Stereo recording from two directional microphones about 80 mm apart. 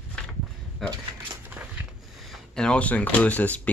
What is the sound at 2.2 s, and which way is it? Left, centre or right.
Speech, centre.